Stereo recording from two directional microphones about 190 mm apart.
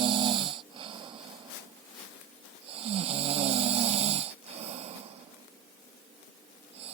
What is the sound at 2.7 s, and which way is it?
Snoring, 30° right (ahead or behind).